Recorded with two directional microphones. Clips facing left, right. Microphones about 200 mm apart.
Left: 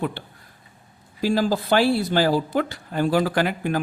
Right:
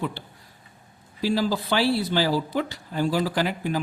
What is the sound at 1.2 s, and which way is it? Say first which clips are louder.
Speech: left 3 dB; 45° left (ahead or behind).